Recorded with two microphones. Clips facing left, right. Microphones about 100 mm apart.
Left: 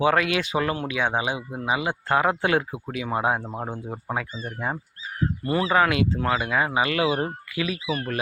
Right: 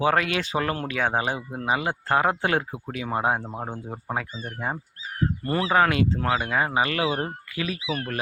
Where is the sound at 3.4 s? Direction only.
10° right (ahead or behind).